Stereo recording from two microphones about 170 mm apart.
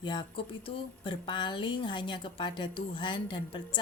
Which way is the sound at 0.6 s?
30° left (ahead or behind).